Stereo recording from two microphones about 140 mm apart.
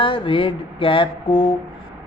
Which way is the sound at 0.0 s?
40° left (ahead or behind).